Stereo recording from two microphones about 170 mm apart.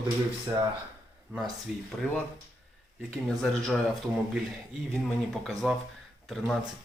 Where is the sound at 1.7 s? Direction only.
5° right (ahead or behind).